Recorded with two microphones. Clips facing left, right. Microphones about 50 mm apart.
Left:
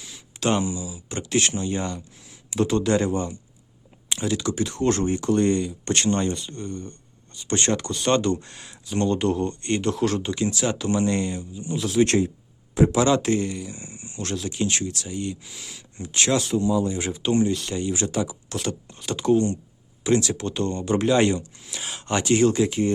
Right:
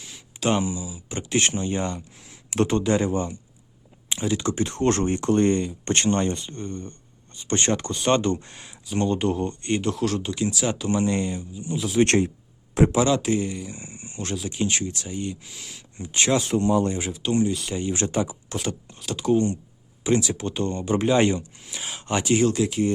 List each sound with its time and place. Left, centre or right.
0.3 s speech: centre
1.2 s speech: right
4.4 s speech: right
8.4 s speech: centre
12.0 s speech: right
13.0 s speech: centre
14.3 s speech: centre
15.4 s speech: centre
16.0 s speech: centre
16.6 s speech: right
17.0 s speech: centre
17.9 s speech: right
18.5 s speech: centre